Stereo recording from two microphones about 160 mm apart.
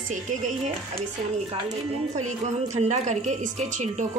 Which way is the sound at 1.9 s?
45° right (ahead or behind).